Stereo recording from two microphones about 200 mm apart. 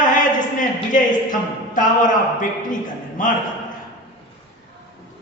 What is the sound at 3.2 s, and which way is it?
Speech, 40° left (ahead or behind).